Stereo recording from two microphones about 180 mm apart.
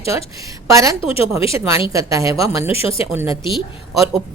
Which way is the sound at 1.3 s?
15° right (ahead or behind).